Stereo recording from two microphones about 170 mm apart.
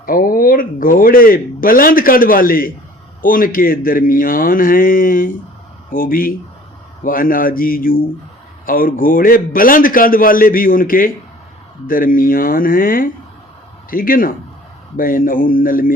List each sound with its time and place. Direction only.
0.0 s a man's voice: 55° left (ahead or behind)